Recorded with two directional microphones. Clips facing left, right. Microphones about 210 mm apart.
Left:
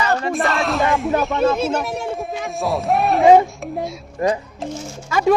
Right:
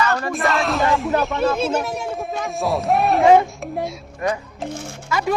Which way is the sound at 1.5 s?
Centre (ahead or behind).